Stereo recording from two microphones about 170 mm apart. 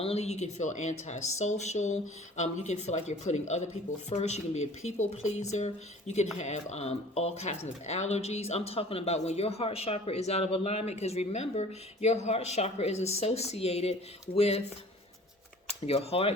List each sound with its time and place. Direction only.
0.0 s speech: 35° left (ahead or behind)
15.9 s speech: 35° left (ahead or behind)